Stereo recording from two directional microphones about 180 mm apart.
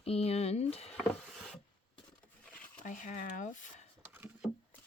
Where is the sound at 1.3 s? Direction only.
Centre (ahead or behind).